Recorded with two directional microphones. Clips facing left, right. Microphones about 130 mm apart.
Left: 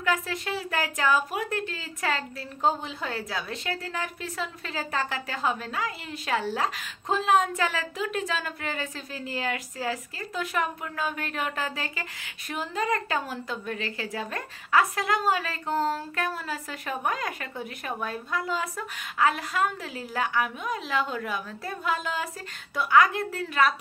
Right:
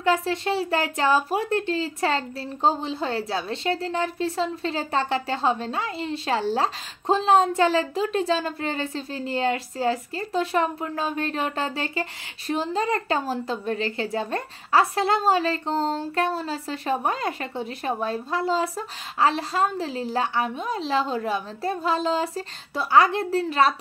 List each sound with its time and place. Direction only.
0.0 s a woman's voice: 30° right (ahead or behind)